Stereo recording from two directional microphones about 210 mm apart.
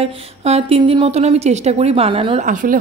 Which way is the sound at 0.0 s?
30° right (ahead or behind).